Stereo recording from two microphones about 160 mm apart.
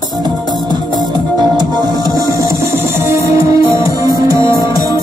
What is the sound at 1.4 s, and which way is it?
Music, 25° right (ahead or behind).